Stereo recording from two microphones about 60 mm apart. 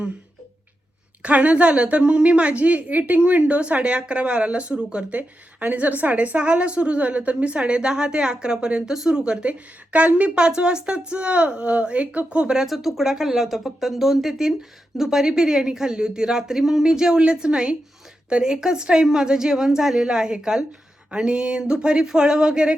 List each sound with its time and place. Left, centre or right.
1.2 s a woman's voice: right
12.6 s a woman's voice: centre